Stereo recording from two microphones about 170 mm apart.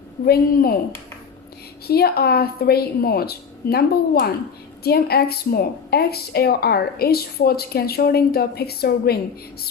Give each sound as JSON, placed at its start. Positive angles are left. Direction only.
{"t": 0.3, "sound": "a woman's voice", "side_deg": 60}
{"t": 1.9, "sound": "a woman's voice", "side_deg": 65}